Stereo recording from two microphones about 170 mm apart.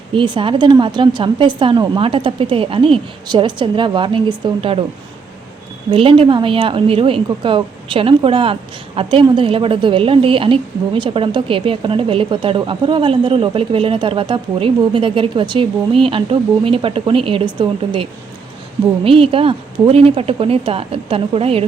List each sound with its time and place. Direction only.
0.1 s a woman's voice: 30° right (ahead or behind)
5.9 s a woman's voice: 30° right (ahead or behind)